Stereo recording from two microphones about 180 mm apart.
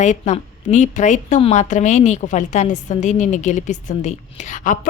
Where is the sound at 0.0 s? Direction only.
40° left (ahead or behind).